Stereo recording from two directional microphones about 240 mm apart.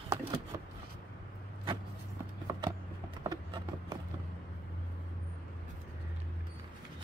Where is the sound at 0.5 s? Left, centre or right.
Centre.